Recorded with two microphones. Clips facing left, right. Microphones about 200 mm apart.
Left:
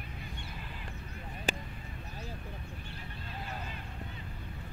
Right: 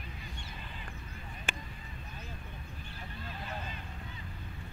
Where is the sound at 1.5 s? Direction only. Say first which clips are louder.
Left 7 dB; 35° left (ahead or behind).